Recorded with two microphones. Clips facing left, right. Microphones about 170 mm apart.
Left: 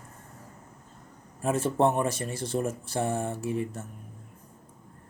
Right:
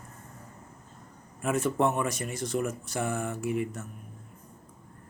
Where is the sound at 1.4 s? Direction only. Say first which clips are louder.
Left 2 dB; 30° left (ahead or behind).